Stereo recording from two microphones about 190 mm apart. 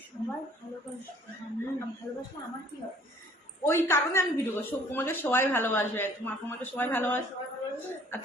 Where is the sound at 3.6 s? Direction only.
15° left (ahead or behind).